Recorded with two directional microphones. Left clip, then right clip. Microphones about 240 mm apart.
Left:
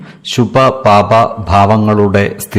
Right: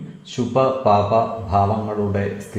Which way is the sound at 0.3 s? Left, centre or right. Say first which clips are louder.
Left 9 dB; left.